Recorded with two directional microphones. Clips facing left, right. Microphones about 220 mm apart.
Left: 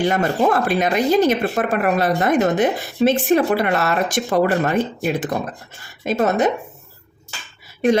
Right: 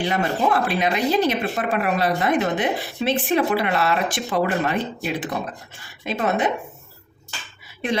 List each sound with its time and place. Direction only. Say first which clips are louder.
0.0 s speech: left 4 dB; 45° left (ahead or behind)